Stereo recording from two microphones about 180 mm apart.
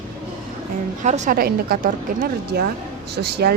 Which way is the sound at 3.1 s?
65° right (ahead or behind).